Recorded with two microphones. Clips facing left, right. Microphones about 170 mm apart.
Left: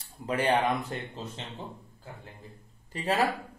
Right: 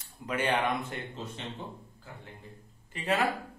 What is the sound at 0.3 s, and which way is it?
Speech, 35° left (ahead or behind).